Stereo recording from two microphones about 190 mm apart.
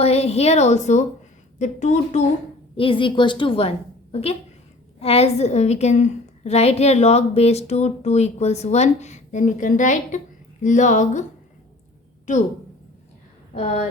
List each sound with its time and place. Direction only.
0.0 s a woman's voice: 30° left (ahead or behind)
2.7 s a woman's voice: 25° left (ahead or behind)
13.5 s speech: 35° left (ahead or behind)